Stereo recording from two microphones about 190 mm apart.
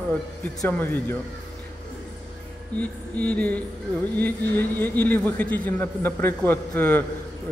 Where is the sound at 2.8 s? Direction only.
5° left (ahead or behind).